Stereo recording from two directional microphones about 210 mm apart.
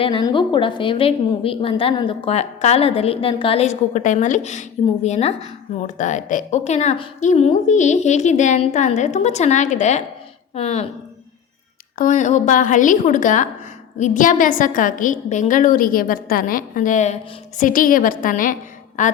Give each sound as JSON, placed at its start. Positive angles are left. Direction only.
{"t": 0.0, "sound": "a woman's voice", "side_deg": 25}
{"t": 11.9, "sound": "a woman's voice", "side_deg": 40}